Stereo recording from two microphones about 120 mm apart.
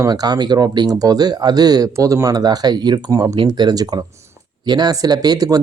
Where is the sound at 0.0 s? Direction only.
35° right (ahead or behind).